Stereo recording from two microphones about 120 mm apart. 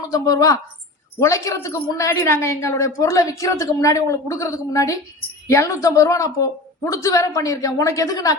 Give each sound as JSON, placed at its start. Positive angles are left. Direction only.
{"t": 0.1, "sound": "a woman's voice", "side_deg": 30}